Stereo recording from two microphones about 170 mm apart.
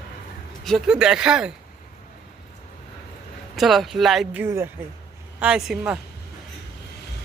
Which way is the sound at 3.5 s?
Centre (ahead or behind).